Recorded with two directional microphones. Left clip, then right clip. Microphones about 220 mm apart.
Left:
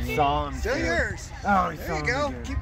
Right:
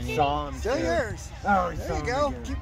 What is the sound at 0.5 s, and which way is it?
Speech, 30° right (ahead or behind).